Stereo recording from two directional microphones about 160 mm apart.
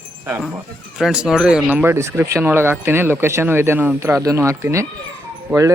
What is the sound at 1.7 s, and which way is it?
Speech, 15° right (ahead or behind).